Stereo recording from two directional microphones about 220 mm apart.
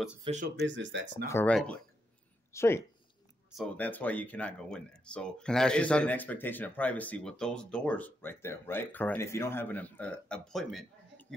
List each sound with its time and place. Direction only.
0.2 s speech: 30° right (ahead or behind)
0.7 s speech: 55° right (ahead or behind)
1.2 s speech: 10° left (ahead or behind)